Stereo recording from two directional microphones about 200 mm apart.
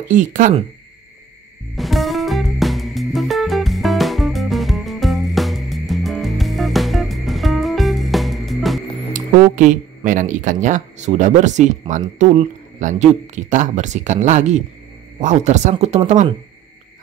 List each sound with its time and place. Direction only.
0.1 s speech: 40° right (ahead or behind)
1.8 s music: centre (ahead or behind)
9.1 s speech: 40° right (ahead or behind)